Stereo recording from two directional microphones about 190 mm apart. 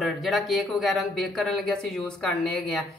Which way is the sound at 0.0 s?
Centre (ahead or behind).